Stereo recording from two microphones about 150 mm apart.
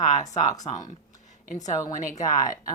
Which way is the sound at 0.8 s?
55° left (ahead or behind).